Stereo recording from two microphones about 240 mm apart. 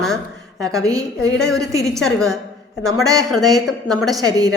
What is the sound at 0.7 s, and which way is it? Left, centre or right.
Speech, centre.